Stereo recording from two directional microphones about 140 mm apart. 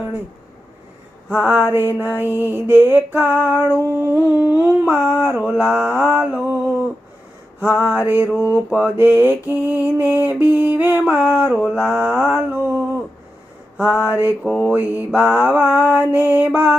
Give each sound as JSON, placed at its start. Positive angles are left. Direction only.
{"t": 1.3, "sound": "humming", "side_deg": -10}
{"t": 13.8, "sound": "mantra", "side_deg": 20}
{"t": 14.7, "sound": "humming", "side_deg": -10}